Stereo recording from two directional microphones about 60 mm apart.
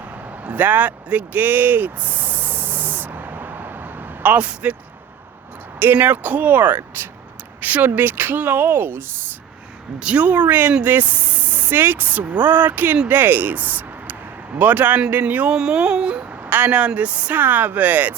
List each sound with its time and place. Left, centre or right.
0.4 s a sound: right
5.8 s speech: right
10.0 s speech: right
16.5 s speech: right
16.7 s speech: right